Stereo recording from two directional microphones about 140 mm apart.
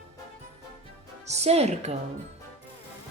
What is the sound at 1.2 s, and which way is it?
Speech, 50° right (ahead or behind).